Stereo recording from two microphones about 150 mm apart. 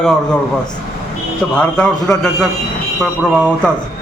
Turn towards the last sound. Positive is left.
turn(degrees=5)  # may be behind; listen again after turning